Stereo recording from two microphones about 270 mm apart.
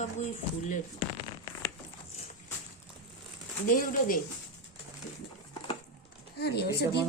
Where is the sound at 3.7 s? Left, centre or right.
Left.